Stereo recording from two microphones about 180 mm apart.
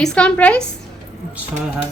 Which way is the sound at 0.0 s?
5° left (ahead or behind).